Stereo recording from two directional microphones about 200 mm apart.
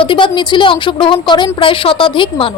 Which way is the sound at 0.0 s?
25° left (ahead or behind).